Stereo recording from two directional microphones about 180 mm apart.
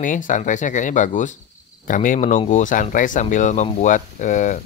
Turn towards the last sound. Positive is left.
turn(degrees=45)  # may be behind; listen again after turning